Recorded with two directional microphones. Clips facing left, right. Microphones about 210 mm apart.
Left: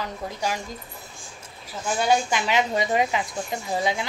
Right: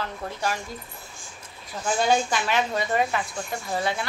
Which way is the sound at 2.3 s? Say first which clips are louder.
Left 2 dB; 15° left (ahead or behind).